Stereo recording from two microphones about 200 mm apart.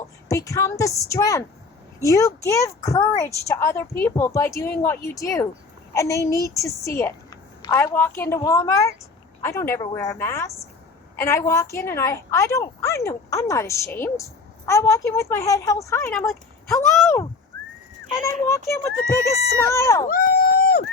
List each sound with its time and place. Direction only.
0.3 s a woman's voice: 15° left (ahead or behind)
18.4 s a woman's voice: 15° left (ahead or behind)
20.1 s a sound: 45° left (ahead or behind)